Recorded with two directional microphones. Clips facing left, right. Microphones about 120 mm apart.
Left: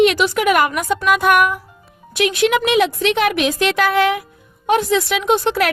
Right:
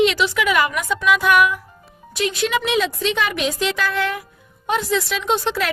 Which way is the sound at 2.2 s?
65° left (ahead or behind).